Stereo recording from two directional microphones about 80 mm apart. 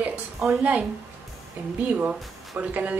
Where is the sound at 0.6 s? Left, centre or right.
Centre.